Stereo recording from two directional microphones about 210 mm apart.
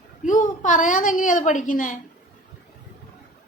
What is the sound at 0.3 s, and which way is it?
A woman's voice, 35° left (ahead or behind).